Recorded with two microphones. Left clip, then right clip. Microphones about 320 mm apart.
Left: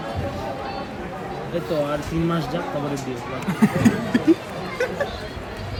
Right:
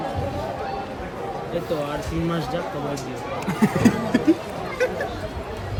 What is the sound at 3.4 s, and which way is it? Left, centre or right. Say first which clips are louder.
Speech: even; centre.